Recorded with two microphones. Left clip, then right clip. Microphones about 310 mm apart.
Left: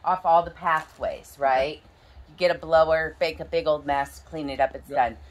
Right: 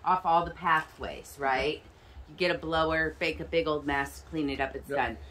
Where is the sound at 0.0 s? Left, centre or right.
Centre.